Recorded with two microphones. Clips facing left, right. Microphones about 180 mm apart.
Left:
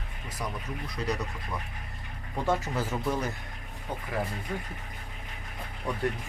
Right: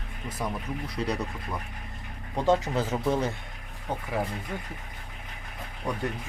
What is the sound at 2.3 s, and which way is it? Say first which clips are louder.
Speech: right 5 dB; 20° right (ahead or behind).